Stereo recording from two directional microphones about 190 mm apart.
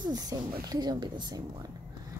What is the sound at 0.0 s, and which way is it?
Speech, 20° right (ahead or behind).